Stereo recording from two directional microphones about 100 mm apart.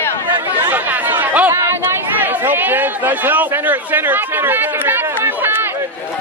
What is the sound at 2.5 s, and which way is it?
A man's voice, 20° right (ahead or behind).